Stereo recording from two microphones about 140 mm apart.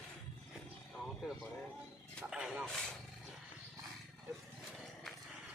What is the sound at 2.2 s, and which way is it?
Speech, 5° right (ahead or behind).